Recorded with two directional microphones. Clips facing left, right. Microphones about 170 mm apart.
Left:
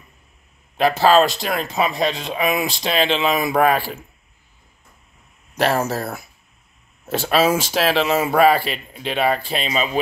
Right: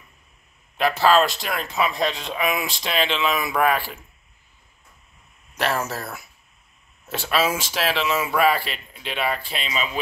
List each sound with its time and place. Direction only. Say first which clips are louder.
0.7 s speech: left 3 dB; 30° left (ahead or behind)
5.6 s speech: left 6 dB; 35° left (ahead or behind)